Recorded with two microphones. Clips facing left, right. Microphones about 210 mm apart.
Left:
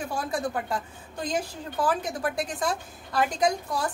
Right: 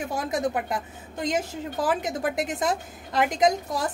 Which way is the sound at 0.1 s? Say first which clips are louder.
Right 3 dB; 20° right (ahead or behind).